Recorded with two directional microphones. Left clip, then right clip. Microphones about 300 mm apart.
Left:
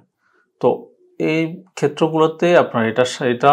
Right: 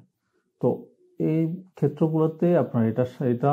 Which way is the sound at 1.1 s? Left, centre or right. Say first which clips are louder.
Left 7 dB; centre.